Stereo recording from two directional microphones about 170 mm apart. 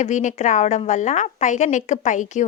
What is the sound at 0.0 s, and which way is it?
A woman's voice, 45° left (ahead or behind).